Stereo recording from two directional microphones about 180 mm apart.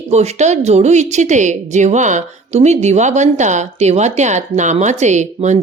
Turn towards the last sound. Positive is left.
turn(degrees=-40)  # may be behind; listen again after turning